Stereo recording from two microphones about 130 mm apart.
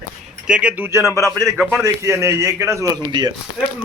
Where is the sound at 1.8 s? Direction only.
20° right (ahead or behind).